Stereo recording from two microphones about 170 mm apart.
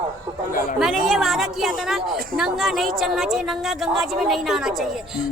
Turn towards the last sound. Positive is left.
turn(degrees=0)  # may be behind; listen again after turning